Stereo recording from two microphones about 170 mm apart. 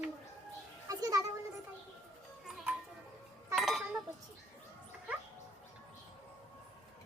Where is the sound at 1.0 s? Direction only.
20° right (ahead or behind).